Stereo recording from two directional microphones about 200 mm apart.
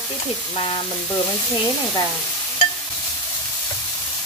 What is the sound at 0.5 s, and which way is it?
Speech, 30° left (ahead or behind).